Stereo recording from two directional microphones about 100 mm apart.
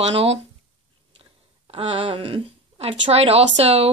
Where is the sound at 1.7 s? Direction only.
75° right (ahead or behind).